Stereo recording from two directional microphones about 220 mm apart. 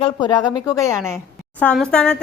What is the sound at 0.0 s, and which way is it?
Speech, 20° left (ahead or behind).